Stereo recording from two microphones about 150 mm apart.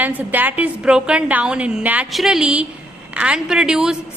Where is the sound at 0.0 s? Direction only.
10° right (ahead or behind).